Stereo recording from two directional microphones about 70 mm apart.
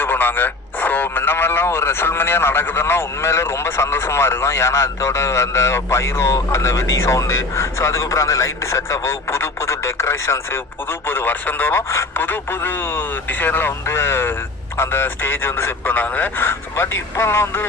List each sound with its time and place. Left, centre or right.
0.0 s a man's voice: left